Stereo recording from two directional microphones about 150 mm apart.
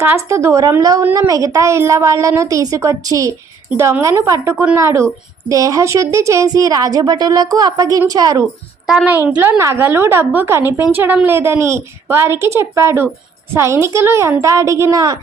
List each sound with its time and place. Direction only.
0.0 s a woman's voice: 15° right (ahead or behind)
8.9 s a woman's voice: 5° right (ahead or behind); by 15.2 s 25° right (ahead or behind)